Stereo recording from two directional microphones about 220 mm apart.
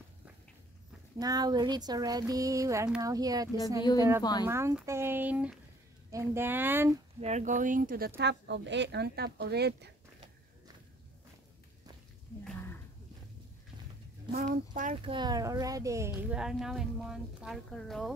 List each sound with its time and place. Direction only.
1.2 s a sound: 15° right (ahead or behind)
4.2 s speech: 20° left (ahead or behind)
4.5 s a sound: 10° right (ahead or behind)
7.2 s speech: 30° right (ahead or behind)
8.2 s speech: 50° right (ahead or behind)
14.3 s speech: 35° right (ahead or behind)
15.0 s speech: 20° right (ahead or behind); by 18.1 s centre (ahead or behind)